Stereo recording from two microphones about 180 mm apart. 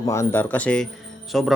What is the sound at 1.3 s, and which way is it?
Music, centre (ahead or behind).